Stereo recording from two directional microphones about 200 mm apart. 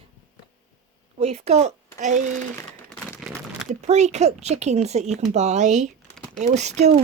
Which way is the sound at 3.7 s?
35° right (ahead or behind).